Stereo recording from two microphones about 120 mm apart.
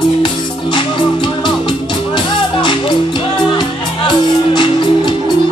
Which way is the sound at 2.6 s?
40° left (ahead or behind).